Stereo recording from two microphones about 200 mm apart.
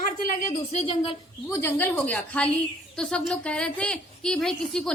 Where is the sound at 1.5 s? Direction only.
15° left (ahead or behind).